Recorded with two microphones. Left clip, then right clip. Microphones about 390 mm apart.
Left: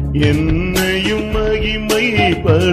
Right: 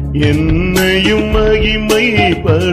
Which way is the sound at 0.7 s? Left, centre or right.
Right.